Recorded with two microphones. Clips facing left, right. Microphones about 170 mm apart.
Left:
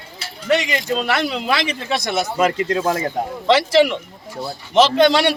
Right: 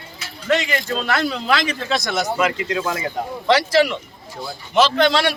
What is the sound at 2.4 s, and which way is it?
Speech, 40° left (ahead or behind).